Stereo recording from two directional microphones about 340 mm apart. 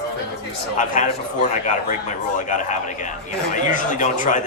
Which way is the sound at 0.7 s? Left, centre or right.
Left.